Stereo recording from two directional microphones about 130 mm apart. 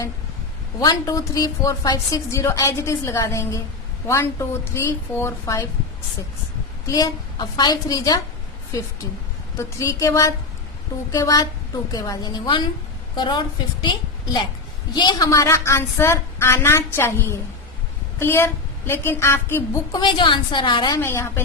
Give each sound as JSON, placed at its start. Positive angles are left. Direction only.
{"t": 0.8, "sound": "a woman's voice", "side_deg": 30}
{"t": 6.8, "sound": "a woman's voice", "side_deg": 30}
{"t": 14.9, "sound": "a woman's voice", "side_deg": 35}
{"t": 15.3, "sound": "a woman's voice", "side_deg": 20}
{"t": 19.9, "sound": "a woman's voice", "side_deg": 35}
{"t": 21.0, "sound": "a woman's voice", "side_deg": 20}